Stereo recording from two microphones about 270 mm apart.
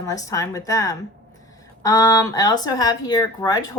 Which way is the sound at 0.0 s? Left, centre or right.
Centre.